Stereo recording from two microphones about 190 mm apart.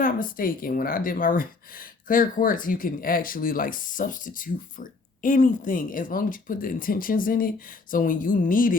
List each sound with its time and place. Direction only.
0.0 s speech: 45° left (ahead or behind)